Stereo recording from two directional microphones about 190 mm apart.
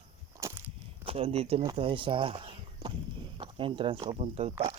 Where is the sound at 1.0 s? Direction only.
30° right (ahead or behind).